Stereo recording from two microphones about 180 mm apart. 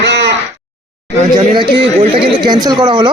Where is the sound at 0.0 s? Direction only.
75° right (ahead or behind).